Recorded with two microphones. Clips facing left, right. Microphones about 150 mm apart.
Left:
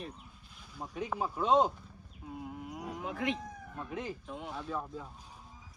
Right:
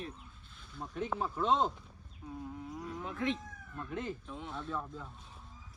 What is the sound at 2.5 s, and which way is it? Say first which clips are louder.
Moo: left 1 dB; 70° left (ahead or behind).